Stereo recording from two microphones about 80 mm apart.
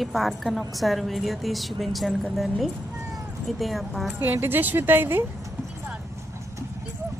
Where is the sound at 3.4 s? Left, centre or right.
Centre.